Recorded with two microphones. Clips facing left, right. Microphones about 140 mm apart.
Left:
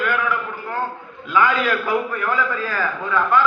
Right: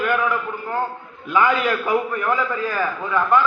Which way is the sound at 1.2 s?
20° right (ahead or behind).